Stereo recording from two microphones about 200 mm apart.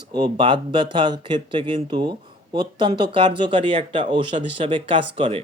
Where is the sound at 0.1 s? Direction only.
20° right (ahead or behind).